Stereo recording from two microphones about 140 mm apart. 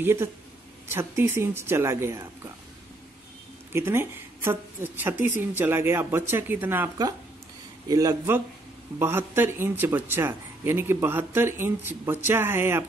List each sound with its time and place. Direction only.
0.0 s speech: 15° right (ahead or behind)
3.7 s speech: 15° right (ahead or behind)
7.9 s speech: 25° right (ahead or behind)